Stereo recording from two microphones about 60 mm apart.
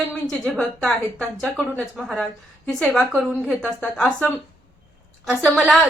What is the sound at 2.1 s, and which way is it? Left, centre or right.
A woman's voice, centre.